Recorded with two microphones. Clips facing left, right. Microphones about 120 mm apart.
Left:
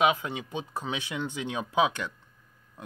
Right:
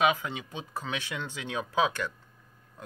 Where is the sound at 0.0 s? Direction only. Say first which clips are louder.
Left 1 dB; 20° left (ahead or behind).